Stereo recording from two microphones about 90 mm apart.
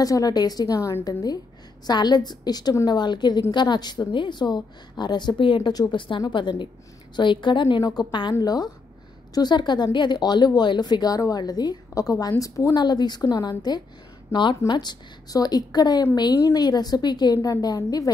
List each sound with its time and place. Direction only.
0.0 s a woman's voice: 45° left (ahead or behind); by 5.7 s 60° left (ahead or behind)
5.7 s a woman's voice: 45° left (ahead or behind)
5.9 s a woman's voice: 65° left (ahead or behind)
8.4 s a woman's voice: 45° left (ahead or behind)
12.7 s a woman's voice: 50° left (ahead or behind)
14.3 s a woman's voice: 60° left (ahead or behind); by 18.1 s 45° left (ahead or behind)